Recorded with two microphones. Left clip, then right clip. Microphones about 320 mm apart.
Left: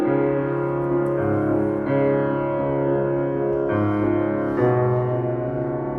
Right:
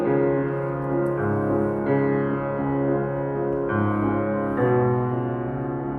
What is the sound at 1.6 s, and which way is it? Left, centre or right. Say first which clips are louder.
Music: left 2 dB; centre.